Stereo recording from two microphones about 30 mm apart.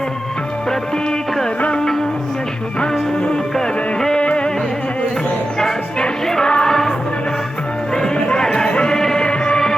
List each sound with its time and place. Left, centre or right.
3.5 s music: centre
4.2 s music: left
6.2 s music: centre
8.4 s a sound: left
8.8 s music: left